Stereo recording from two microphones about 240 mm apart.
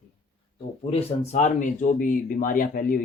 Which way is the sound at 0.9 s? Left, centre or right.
Left.